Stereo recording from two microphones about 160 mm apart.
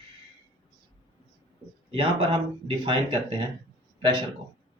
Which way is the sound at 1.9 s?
30° right (ahead or behind).